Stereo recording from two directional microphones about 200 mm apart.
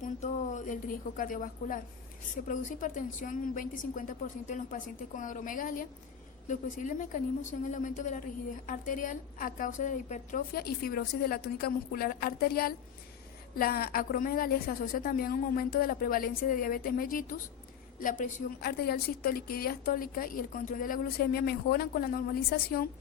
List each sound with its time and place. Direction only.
0.0 s a woman's voice: 35° left (ahead or behind)